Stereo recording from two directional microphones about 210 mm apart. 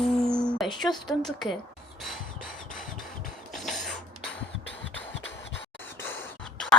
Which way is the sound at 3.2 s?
Centre (ahead or behind).